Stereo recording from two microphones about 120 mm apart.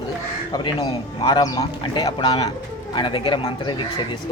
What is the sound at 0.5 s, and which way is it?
Speech, 45° left (ahead or behind).